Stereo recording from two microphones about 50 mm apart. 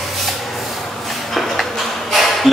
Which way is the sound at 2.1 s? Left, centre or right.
Centre.